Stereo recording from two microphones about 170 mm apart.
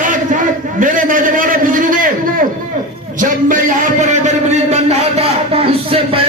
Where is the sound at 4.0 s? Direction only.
45° right (ahead or behind).